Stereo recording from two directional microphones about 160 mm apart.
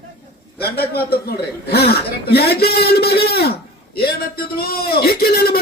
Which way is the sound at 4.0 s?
70° left (ahead or behind).